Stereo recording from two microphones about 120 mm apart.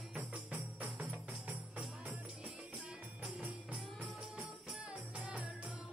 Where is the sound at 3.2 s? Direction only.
10° right (ahead or behind).